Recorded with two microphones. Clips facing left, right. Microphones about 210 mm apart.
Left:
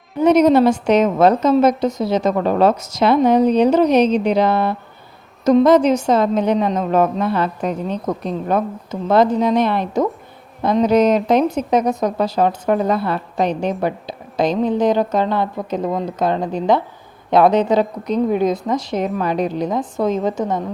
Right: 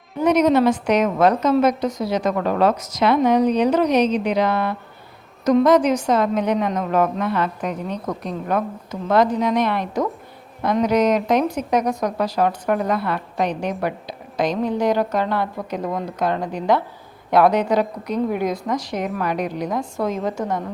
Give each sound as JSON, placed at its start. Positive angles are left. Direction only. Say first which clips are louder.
{"t": 0.2, "sound": "a woman's voice", "louder": "left 4 dB", "side_deg": 30}